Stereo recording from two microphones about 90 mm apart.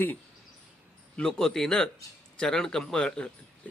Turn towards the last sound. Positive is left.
turn(degrees=10)  # may be behind; listen again after turning